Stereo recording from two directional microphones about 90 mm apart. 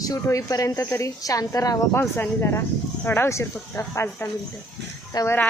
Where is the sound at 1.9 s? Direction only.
25° left (ahead or behind).